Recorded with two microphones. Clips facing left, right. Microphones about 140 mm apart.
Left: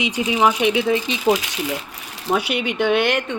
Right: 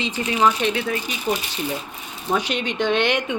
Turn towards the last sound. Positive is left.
turn(degrees=10)  # may be behind; listen again after turning